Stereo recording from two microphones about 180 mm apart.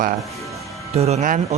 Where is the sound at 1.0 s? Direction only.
40° right (ahead or behind).